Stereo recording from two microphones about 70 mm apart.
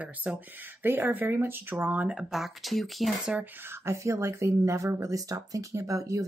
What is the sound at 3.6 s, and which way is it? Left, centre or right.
Speech, right.